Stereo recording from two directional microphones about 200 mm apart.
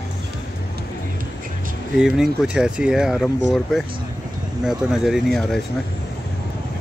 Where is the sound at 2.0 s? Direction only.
5° right (ahead or behind).